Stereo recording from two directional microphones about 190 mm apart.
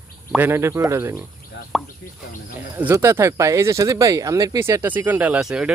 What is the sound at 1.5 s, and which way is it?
Plop, 65° left (ahead or behind).